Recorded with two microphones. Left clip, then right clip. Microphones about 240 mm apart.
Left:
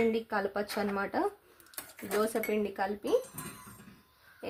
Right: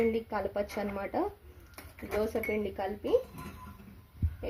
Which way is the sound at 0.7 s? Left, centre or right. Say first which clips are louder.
Left 2 dB; left.